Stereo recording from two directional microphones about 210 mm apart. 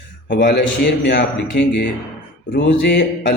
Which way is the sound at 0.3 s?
55° left (ahead or behind).